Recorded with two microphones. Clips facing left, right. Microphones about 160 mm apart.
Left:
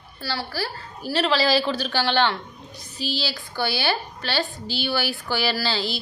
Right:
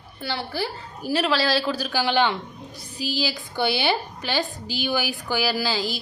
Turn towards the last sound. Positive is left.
turn(degrees=-10)  # may be behind; listen again after turning